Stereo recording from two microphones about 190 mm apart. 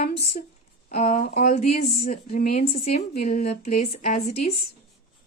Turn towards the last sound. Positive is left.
turn(degrees=35)  # may be behind; listen again after turning